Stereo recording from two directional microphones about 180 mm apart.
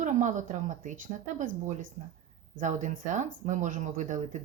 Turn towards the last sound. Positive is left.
turn(degrees=-45)  # may be behind; listen again after turning